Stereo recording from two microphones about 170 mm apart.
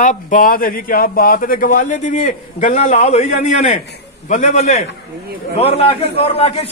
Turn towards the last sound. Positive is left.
turn(degrees=35)  # may be behind; listen again after turning